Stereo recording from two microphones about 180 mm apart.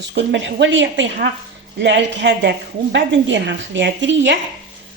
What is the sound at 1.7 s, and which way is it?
A woman's voice, 75° right (ahead or behind).